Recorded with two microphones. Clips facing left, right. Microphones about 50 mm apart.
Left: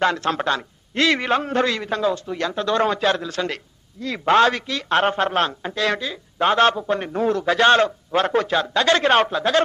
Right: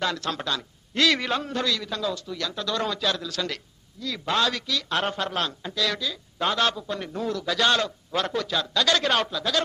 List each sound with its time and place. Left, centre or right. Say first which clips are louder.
0.0 s speech: left 8 dB; left